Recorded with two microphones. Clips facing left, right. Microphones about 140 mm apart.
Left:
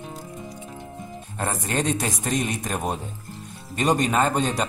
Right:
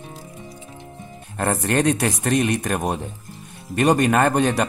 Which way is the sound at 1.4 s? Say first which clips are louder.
Right 6 dB; 60° right (ahead or behind).